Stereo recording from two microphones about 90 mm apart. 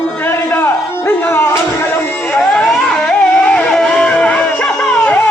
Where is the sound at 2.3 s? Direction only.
10° left (ahead or behind).